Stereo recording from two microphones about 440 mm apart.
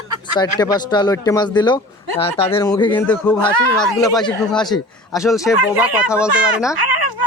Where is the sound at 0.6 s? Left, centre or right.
Centre.